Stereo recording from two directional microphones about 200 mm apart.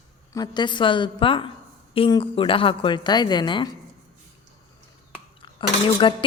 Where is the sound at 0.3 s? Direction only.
20° left (ahead or behind).